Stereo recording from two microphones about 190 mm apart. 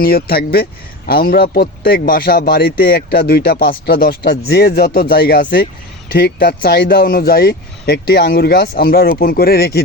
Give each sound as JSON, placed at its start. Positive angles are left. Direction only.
{"t": 0.0, "sound": "a man's voice", "side_deg": 55}